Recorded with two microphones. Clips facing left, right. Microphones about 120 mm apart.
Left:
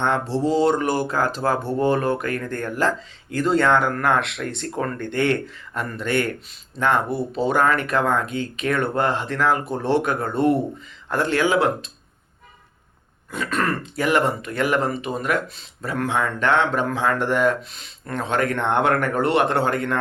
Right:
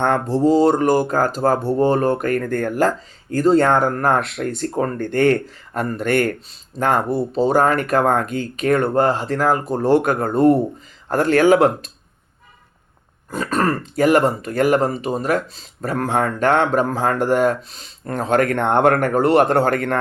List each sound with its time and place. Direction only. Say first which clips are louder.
0.0 s speech: right 5 dB; 45° right (ahead or behind)
13.3 s speech: right 4 dB; 40° right (ahead or behind)